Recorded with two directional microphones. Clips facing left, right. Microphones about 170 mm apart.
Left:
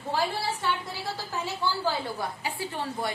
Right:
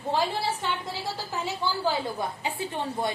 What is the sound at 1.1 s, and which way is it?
A woman's voice, 15° right (ahead or behind).